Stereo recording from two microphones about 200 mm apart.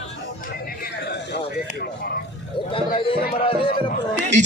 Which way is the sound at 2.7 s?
25° left (ahead or behind).